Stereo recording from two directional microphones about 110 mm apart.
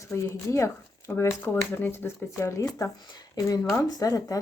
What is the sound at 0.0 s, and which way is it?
Speech, 25° left (ahead or behind).